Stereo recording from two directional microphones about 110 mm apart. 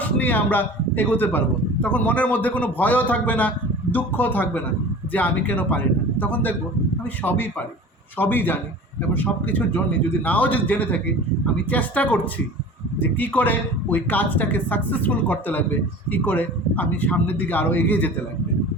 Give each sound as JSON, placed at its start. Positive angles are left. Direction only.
{"t": 0.0, "sound": "a man's voice", "side_deg": 15}